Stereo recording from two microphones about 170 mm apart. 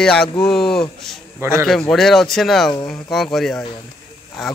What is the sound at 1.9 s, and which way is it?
A man's voice, centre (ahead or behind).